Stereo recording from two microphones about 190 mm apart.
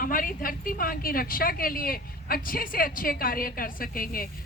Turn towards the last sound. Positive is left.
turn(degrees=50)  # may be behind; listen again after turning